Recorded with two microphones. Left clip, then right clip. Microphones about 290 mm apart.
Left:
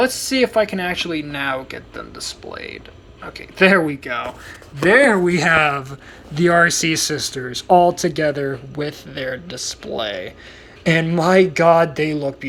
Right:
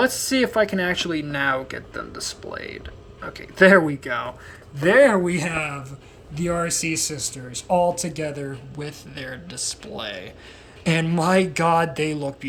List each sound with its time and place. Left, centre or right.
0.0 s speech: centre